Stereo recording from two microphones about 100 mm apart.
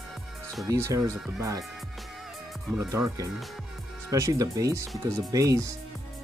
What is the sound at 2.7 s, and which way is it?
Speech, 30° right (ahead or behind).